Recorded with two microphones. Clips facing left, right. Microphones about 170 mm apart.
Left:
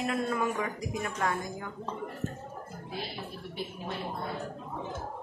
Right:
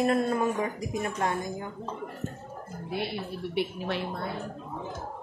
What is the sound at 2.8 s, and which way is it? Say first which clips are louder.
A woman's voice: right 8 dB; 65° right (ahead or behind).